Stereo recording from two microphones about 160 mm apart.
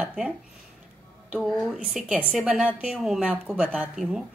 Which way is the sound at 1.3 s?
Centre (ahead or behind).